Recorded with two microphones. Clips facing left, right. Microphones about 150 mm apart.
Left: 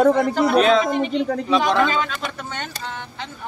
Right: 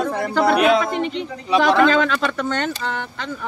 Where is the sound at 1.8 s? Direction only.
80° right.